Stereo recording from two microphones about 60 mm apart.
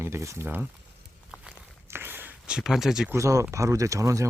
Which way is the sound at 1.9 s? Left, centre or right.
Right.